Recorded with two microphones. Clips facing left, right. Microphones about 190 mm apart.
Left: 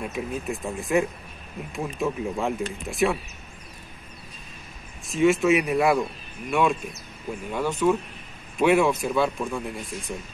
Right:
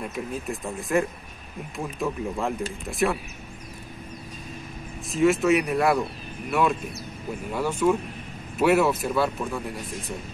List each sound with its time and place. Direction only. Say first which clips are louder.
0.1 s speech: left 1 dB; centre (ahead or behind)
5.1 s speech: even; centre (ahead or behind)